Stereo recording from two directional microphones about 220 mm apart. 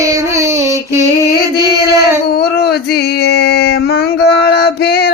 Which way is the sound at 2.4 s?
45° left (ahead or behind).